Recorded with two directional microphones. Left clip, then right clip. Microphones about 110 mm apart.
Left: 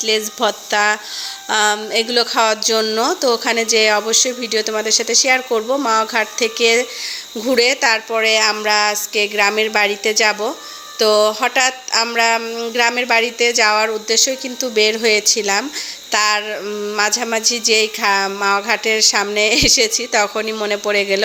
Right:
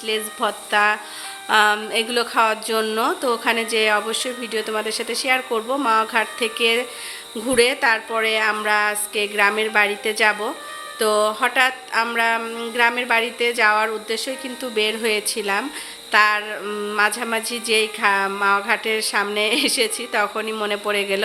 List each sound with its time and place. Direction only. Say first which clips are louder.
0.0 s a woman's voice: left 6 dB; 35° left (ahead or behind)
16.6 s speech: left 3 dB; 15° left (ahead or behind)
17.0 s a woman's voice: left 3 dB; 25° left (ahead or behind)